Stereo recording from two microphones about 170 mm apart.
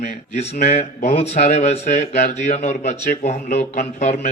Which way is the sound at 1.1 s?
40° left (ahead or behind).